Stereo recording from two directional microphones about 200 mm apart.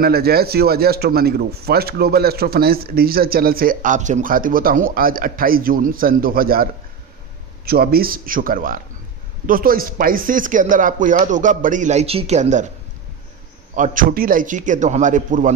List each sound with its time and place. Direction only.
0.0 s speech: 50° right (ahead or behind)
13.7 s speech: 40° right (ahead or behind)